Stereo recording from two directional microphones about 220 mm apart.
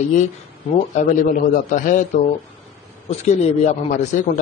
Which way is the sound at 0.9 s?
35° left (ahead or behind).